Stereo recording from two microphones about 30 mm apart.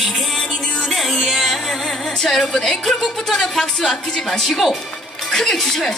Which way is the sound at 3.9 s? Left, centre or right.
Centre.